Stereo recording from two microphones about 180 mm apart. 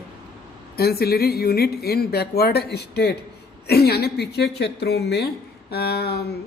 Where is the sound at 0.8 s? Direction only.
60° left (ahead or behind).